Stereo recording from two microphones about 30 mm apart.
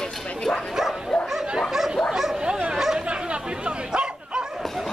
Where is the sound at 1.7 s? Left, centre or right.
Centre.